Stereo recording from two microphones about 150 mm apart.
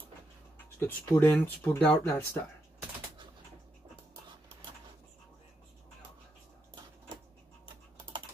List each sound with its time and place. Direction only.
0.7 s speech: 15° left (ahead or behind)